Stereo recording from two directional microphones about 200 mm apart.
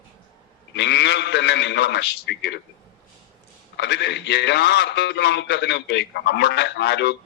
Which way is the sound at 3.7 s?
60° left (ahead or behind).